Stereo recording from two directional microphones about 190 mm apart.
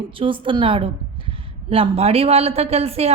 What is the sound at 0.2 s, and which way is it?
A woman's voice, 25° right (ahead or behind).